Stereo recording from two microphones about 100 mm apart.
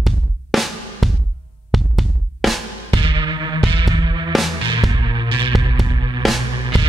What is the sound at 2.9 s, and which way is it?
Music, 55° right (ahead or behind).